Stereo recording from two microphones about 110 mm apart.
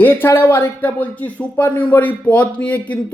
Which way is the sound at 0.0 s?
20° left (ahead or behind).